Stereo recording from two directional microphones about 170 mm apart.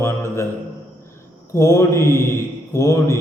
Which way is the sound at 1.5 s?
15° left (ahead or behind).